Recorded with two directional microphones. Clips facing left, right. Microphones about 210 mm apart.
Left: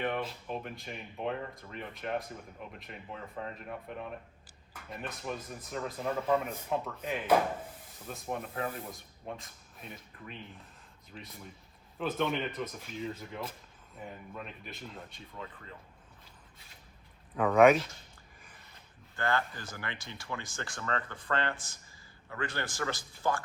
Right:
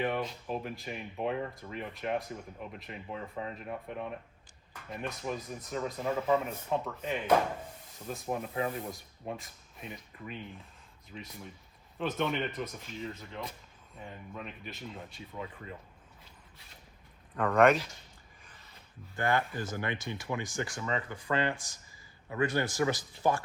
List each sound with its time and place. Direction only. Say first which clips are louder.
0.0 s speech: right 2 dB; centre (ahead or behind)
17.3 s speech: left 2 dB; 5° left (ahead or behind)
19.1 s speech: right 2 dB; 15° right (ahead or behind)